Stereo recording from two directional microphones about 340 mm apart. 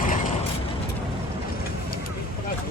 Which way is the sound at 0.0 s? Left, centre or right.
Left.